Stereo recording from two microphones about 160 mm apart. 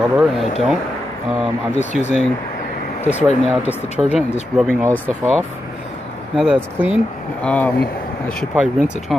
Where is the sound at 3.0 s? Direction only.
45° left (ahead or behind).